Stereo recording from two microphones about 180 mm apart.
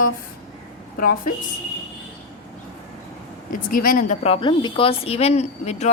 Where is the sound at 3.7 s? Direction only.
50° left (ahead or behind).